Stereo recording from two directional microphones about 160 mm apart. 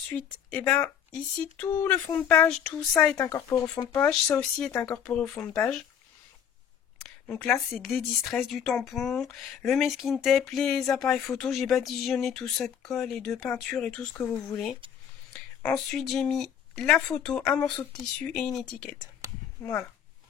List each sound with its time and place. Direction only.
0.1 s speech: 10° left (ahead or behind)
3.9 s speech: 5° left (ahead or behind)
7.0 s a sound: 5° left (ahead or behind)
7.5 s speech: centre (ahead or behind)